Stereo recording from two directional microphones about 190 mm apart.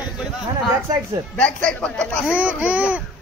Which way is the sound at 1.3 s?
5° left (ahead or behind).